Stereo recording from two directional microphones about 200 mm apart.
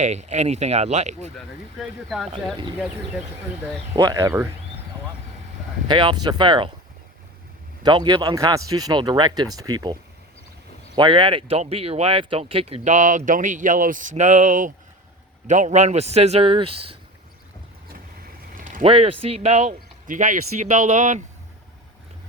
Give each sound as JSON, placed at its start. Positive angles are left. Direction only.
{"t": 0.0, "sound": "speech", "side_deg": -35}
{"t": 1.4, "sound": "speech", "side_deg": 0}
{"t": 3.9, "sound": "speech", "side_deg": -20}
{"t": 5.9, "sound": "speech", "side_deg": -20}
{"t": 7.9, "sound": "speech", "side_deg": -20}
{"t": 18.5, "sound": "a sound", "side_deg": -40}
{"t": 18.9, "sound": "speech", "side_deg": -30}